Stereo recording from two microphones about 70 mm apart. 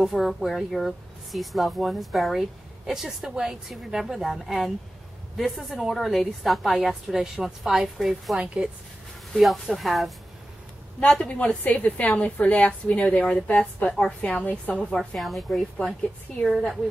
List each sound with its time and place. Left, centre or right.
0.0 s a woman's voice: centre
9.3 s a woman's voice: centre
11.2 s a woman's voice: centre
15.0 s a woman's voice: centre